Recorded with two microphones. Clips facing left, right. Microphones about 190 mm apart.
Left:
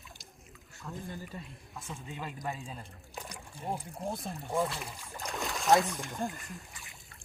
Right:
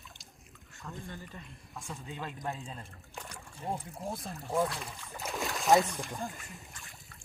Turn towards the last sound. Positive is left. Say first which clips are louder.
# left 3 dB
turn(degrees=0)  # may be behind; listen again after turning